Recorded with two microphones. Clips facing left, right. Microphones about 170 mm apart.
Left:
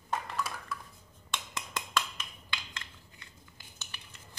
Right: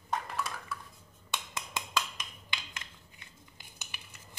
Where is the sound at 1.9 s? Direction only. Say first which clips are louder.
Left 1 dB; 15° right (ahead or behind).